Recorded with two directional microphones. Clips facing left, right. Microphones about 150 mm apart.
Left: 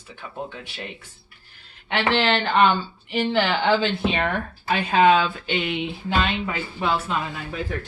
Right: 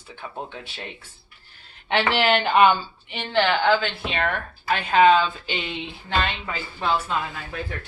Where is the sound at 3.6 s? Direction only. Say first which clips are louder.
Left 1 dB; 15° left (ahead or behind).